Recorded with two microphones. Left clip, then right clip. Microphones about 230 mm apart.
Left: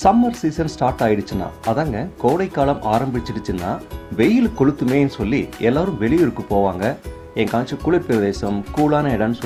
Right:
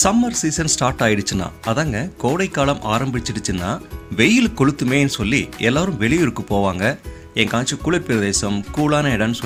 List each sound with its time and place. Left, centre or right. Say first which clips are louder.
0.0 s speech: left 2 dB; right